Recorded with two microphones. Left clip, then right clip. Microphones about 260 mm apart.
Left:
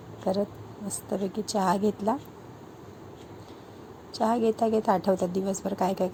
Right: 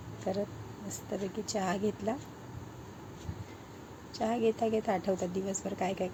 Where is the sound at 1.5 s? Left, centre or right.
Left.